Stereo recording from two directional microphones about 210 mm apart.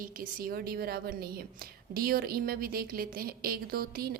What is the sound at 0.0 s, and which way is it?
A woman's voice, 40° right (ahead or behind).